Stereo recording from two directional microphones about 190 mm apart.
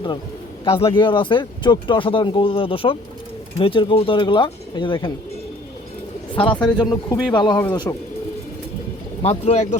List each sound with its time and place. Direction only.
0.6 s speech: 30° left (ahead or behind)
6.3 s speech: 25° left (ahead or behind)
9.2 s speech: 30° left (ahead or behind)